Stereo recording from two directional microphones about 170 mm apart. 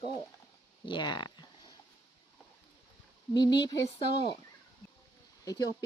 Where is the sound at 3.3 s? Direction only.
25° left (ahead or behind).